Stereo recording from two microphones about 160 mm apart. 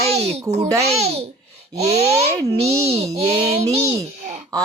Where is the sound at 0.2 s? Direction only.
40° right (ahead or behind).